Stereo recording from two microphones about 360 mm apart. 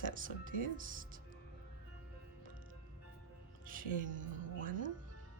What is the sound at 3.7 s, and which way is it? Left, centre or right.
Speech, right.